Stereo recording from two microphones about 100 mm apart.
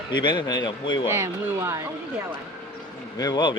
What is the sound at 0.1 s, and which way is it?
Speech, 50° left (ahead or behind).